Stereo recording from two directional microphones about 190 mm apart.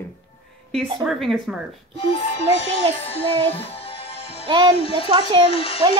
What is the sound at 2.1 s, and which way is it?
Music, 30° left (ahead or behind).